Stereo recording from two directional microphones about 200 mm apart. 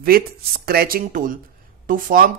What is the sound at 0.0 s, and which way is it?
Speech, 50° right (ahead or behind).